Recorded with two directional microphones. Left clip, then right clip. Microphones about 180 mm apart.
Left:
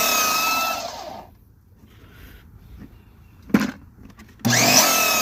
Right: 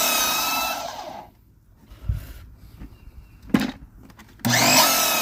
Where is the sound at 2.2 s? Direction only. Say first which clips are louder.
Right 1 dB; 35° right (ahead or behind).